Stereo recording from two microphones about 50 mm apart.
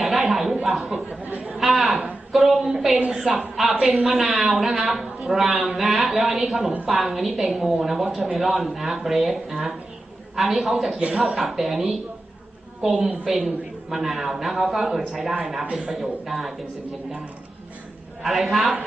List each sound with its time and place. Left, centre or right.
0.0 s a sound: centre
2.3 s a man's voice: centre
18.2 s a man's voice: centre